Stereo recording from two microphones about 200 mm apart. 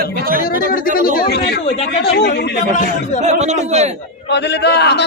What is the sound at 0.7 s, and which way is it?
A man's voice, 45° left (ahead or behind).